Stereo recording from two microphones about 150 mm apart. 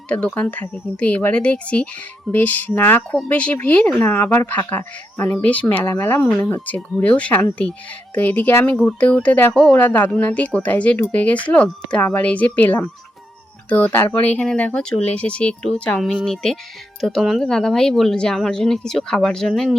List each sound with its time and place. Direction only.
0.1 s speech: 10° left (ahead or behind)